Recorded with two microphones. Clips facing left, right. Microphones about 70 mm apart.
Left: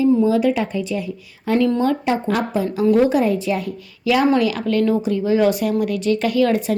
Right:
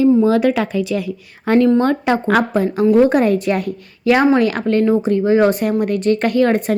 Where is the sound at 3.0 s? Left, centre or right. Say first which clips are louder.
Right 3 dB; right.